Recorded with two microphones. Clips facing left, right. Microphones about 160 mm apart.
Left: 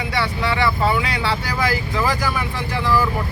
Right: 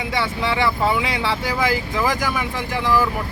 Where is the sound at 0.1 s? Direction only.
20° right (ahead or behind).